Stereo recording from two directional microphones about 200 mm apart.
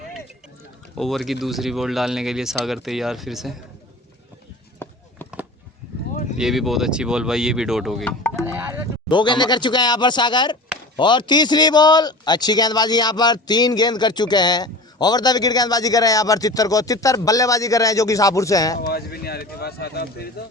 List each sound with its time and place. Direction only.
0.9 s speech: centre (ahead or behind)
4.8 s chop: 10° left (ahead or behind)
6.3 s speech: centre (ahead or behind)
9.0 s a man's voice: 20° left (ahead or behind)
18.8 s speech: 50° left (ahead or behind)